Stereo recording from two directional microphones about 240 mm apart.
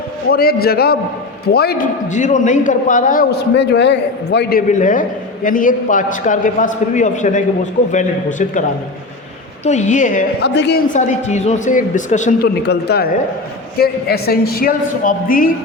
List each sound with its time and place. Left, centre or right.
0.3 s a man's voice: left
9.6 s a man's voice: left
10.5 s speech: left
10.9 s a man's voice: left
12.6 s a man's voice: left